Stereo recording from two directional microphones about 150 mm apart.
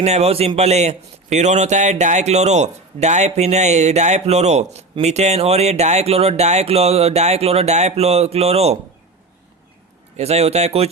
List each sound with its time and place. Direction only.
0.0 s a man's voice: 45° right (ahead or behind)
10.2 s a man's voice: 45° right (ahead or behind)